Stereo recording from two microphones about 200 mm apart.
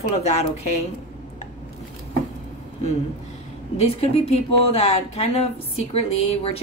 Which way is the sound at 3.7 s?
30° left (ahead or behind).